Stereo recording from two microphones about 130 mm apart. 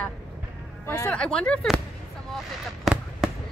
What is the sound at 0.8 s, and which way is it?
Speech, 20° left (ahead or behind).